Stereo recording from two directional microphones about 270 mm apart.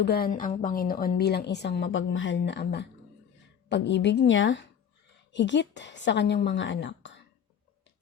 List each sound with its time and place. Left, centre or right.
0.0 s a woman's voice: left